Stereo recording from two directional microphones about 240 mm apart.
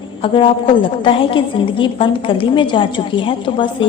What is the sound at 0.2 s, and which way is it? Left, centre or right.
A woman's voice, left.